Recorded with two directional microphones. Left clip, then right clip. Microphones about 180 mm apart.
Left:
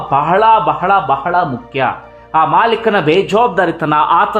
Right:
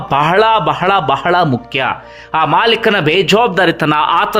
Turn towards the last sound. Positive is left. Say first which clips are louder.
# left 1 dB
turn(degrees=-20)  # may be behind; listen again after turning